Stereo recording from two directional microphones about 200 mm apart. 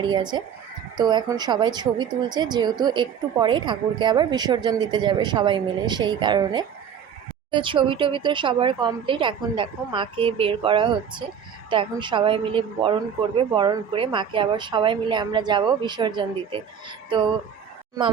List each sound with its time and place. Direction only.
0.0 s speech: 20° right (ahead or behind)